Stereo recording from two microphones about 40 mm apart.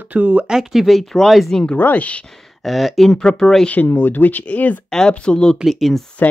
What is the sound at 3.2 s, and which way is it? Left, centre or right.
Speech, centre.